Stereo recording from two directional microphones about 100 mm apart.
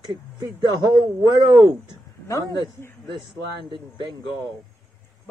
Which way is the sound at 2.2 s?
30° left (ahead or behind).